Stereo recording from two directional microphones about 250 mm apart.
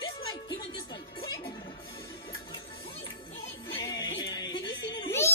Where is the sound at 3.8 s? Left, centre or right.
Centre.